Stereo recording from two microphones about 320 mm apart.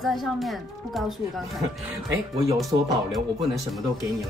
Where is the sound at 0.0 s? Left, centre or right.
Centre.